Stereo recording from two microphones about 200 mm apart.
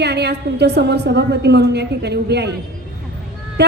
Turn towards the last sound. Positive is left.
turn(degrees=-55)  # may be behind; listen again after turning